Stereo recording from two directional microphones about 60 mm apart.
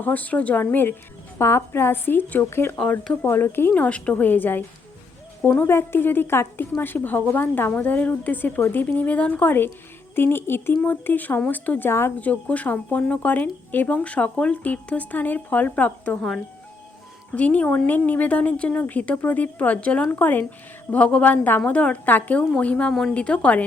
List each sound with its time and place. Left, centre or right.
0.0 s speech: left
1.4 s speech: left
3.8 s speech: left
6.8 s speech: left
10.2 s speech: left
11.9 s speech: left
12.2 s speech: left
17.3 s speech: left